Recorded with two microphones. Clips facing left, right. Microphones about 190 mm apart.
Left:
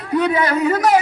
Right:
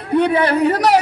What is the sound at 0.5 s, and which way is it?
Speech, 35° right (ahead or behind).